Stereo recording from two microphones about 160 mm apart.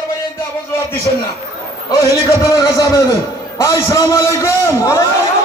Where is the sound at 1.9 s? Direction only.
20° left (ahead or behind).